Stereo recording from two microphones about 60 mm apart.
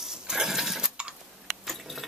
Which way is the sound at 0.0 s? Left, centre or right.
Centre.